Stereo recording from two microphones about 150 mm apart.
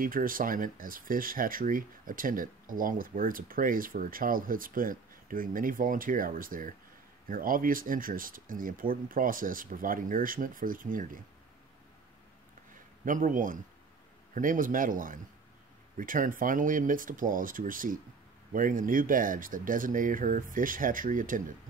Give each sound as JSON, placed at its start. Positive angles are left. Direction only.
{"t": 0.0, "sound": "speech", "side_deg": -70}
{"t": 13.0, "sound": "speech", "side_deg": -60}